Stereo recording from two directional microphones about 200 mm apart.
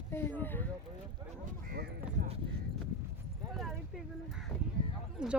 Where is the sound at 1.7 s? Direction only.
50° right (ahead or behind).